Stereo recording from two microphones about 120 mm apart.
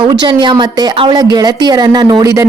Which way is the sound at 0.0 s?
40° right (ahead or behind).